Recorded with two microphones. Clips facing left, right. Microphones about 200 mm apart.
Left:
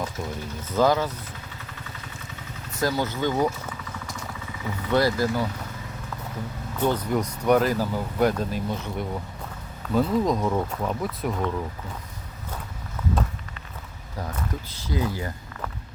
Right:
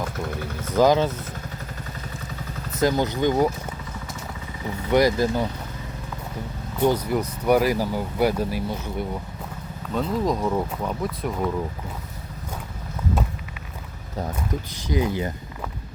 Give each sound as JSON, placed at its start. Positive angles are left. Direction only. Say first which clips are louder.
{"t": 0.8, "sound": "speech", "louder": "right 3 dB", "side_deg": -20}
{"t": 2.7, "sound": "speech", "louder": "right 4 dB", "side_deg": -20}
{"t": 4.9, "sound": "speech", "louder": "right 3 dB", "side_deg": -15}
{"t": 6.7, "sound": "speech", "louder": "right 3 dB", "side_deg": -10}
{"t": 14.3, "sound": "speech", "louder": "right 3 dB", "side_deg": -15}